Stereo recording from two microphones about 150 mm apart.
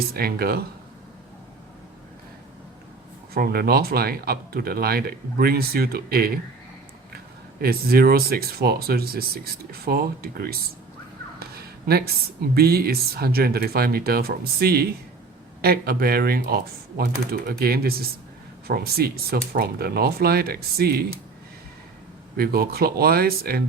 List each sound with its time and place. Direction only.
0.1 s speech: 90° right
3.3 s speech: 90° right
7.6 s speech: 90° right
11.9 s speech: 90° right
22.4 s speech: 90° right